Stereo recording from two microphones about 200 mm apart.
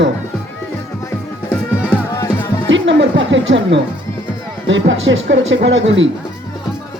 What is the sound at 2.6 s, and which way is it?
Speech, 70° right (ahead or behind).